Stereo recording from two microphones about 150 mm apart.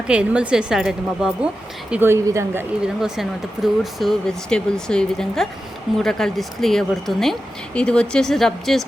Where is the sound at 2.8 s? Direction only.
5° right (ahead or behind).